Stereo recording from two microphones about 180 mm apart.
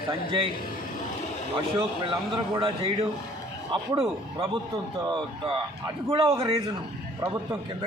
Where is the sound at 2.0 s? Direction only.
30° right (ahead or behind).